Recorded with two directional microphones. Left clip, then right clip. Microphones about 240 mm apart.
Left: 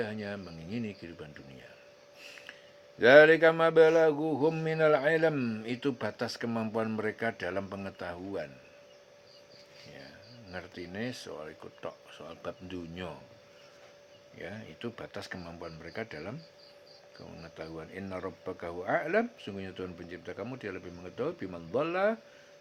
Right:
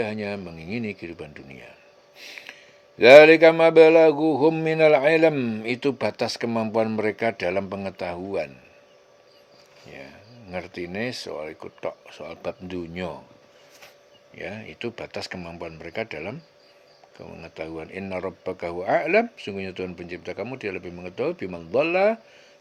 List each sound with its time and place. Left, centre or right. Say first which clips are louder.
0.0 s a man's voice: right 8 dB; right
2.1 s snort: right 8 dB; centre
3.0 s a man's voice: right 9 dB; right
10.5 s a man's voice: right 10 dB; right
14.3 s a man's voice: right 9 dB; right
17.4 s a man's voice: right 9 dB; right